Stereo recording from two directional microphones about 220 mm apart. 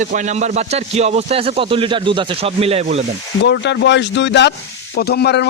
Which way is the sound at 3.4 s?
50° left (ahead or behind).